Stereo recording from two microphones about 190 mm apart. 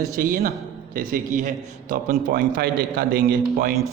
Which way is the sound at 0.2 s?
45° right (ahead or behind).